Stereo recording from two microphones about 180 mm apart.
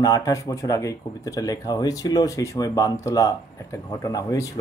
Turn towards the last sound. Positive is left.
turn(degrees=20)  # may be behind; listen again after turning